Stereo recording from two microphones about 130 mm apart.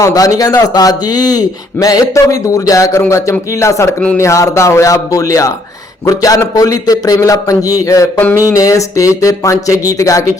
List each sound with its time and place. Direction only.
0.0 s speech: 25° left (ahead or behind)